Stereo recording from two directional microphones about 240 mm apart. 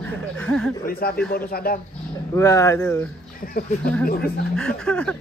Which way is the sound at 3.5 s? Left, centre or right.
Left.